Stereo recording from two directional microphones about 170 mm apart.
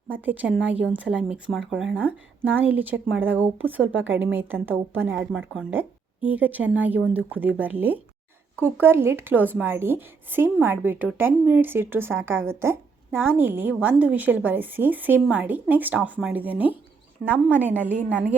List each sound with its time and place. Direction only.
0.1 s a woman's voice: 10° right (ahead or behind)
18.1 s a woman's voice: 10° right (ahead or behind)